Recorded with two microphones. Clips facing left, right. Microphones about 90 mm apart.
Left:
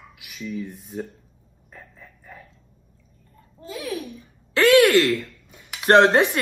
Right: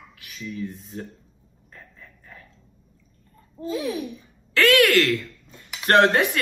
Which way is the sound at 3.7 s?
20° right (ahead or behind).